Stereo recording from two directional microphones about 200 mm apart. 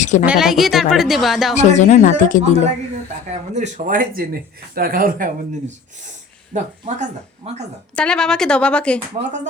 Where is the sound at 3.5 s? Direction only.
40° right (ahead or behind).